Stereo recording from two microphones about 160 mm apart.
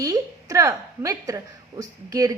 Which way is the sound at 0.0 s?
20° right (ahead or behind).